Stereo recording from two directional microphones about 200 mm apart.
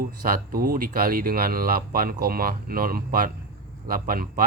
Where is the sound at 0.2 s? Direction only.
45° right (ahead or behind).